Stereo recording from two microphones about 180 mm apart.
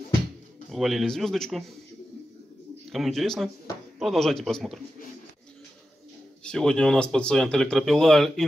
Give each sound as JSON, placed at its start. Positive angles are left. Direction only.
{"t": 0.7, "sound": "speech", "side_deg": 0}
{"t": 2.9, "sound": "speech", "side_deg": 0}
{"t": 6.4, "sound": "speech", "side_deg": 5}